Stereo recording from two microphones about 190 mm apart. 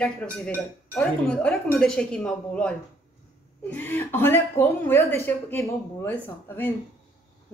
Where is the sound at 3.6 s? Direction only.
10° left (ahead or behind).